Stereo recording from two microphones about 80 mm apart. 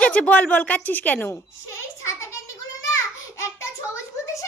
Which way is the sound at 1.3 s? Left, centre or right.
Left.